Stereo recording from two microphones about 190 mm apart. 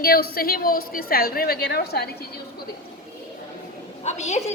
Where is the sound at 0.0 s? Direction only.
55° left (ahead or behind).